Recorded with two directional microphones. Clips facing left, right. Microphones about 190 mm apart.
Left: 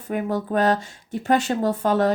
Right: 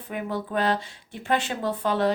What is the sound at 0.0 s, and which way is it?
Speech, 45° left (ahead or behind).